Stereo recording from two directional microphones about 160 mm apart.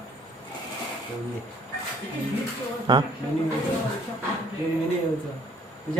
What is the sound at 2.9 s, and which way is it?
Speech, 25° right (ahead or behind).